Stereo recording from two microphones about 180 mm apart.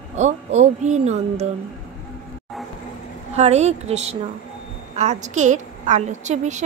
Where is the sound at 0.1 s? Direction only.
40° right (ahead or behind).